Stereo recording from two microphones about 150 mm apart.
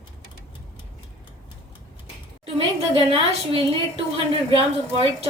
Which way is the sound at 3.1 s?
40° right (ahead or behind).